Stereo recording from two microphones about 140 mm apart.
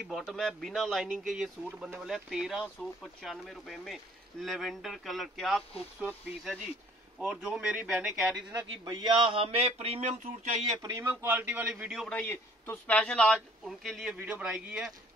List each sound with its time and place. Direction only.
0.0 s speech: centre (ahead or behind)
8.5 s speech: 25° right (ahead or behind); by 10.6 s 55° right (ahead or behind)
10.8 s a man's voice: 15° right (ahead or behind)
12.1 s speech: 15° left (ahead or behind); by 14.9 s 5° right (ahead or behind)